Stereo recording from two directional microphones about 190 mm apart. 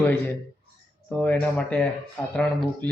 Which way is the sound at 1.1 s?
10° left (ahead or behind).